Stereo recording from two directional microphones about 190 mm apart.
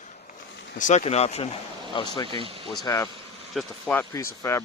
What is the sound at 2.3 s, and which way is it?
Speech, 30° right (ahead or behind).